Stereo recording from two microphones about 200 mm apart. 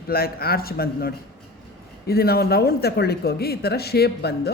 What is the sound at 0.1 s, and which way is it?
A woman's voice, 50° left (ahead or behind).